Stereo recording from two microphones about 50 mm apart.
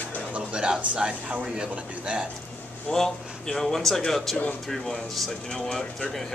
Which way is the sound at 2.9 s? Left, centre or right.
Centre.